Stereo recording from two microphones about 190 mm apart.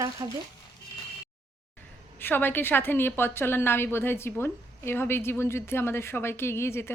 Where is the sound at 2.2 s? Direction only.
10° left (ahead or behind).